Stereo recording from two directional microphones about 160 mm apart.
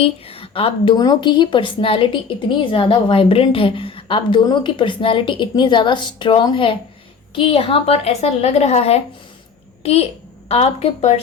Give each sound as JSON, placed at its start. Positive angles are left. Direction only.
{"t": 0.0, "sound": "a woman's voice", "side_deg": 35}